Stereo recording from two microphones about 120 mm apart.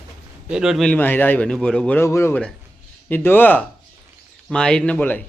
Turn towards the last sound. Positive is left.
turn(degrees=15)  # may be behind; listen again after turning